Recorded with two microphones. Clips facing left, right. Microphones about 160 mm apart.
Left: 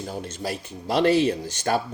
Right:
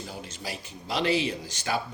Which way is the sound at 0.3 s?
45° left (ahead or behind).